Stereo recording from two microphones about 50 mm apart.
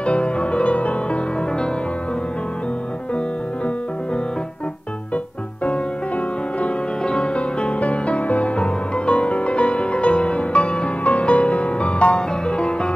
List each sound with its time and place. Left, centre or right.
0.0 s music: left
7.1 s music: centre